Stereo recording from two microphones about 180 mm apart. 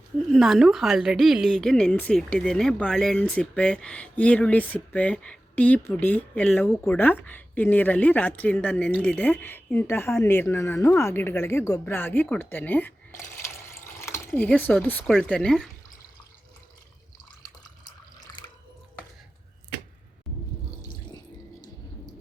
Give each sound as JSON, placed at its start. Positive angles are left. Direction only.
{"t": 0.3, "sound": "a woman's voice", "side_deg": 0}
{"t": 17.6, "sound": "water", "side_deg": 20}